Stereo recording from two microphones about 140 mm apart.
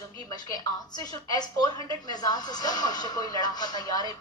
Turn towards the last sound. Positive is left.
turn(degrees=30)  # may be behind; listen again after turning